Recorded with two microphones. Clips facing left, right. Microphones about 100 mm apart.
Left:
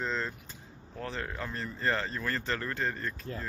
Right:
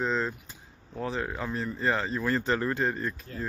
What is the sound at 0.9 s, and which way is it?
Speech, 10° right (ahead or behind).